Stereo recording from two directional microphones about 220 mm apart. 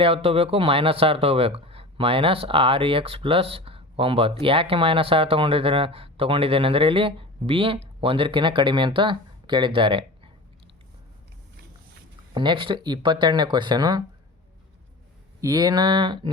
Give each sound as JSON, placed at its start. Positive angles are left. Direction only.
{"t": 0.0, "sound": "speech", "side_deg": -25}
{"t": 12.3, "sound": "speech", "side_deg": -20}
{"t": 15.4, "sound": "speech", "side_deg": -15}